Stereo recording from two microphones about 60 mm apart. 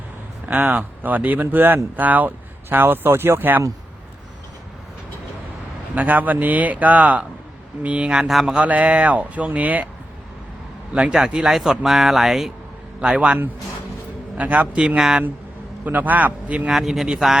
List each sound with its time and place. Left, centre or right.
0.4 s speech: right
5.9 s speech: right
10.9 s speech: centre
13.0 s speech: centre
14.3 s speech: right
14.9 s speech: centre
15.8 s speech: right
16.6 s speech: centre